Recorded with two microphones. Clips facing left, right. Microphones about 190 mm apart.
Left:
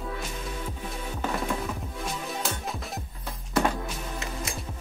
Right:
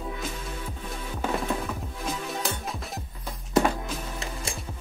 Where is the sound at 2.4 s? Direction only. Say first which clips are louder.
Right 1 dB; centre (ahead or behind).